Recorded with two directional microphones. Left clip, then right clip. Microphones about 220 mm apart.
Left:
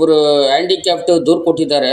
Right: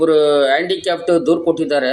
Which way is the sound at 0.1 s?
45° left (ahead or behind).